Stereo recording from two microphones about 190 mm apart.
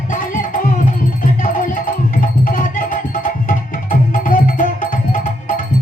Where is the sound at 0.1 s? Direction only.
45° left (ahead or behind).